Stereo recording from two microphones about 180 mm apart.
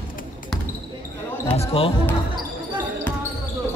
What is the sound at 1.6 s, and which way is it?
Speech, 30° left (ahead or behind).